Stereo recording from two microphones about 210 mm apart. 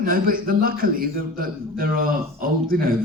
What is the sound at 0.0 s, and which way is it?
A man's voice, 45° right (ahead or behind).